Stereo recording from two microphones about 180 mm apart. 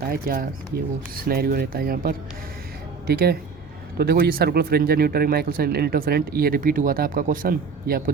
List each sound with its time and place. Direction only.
0.1 s speech: 55° right (ahead or behind)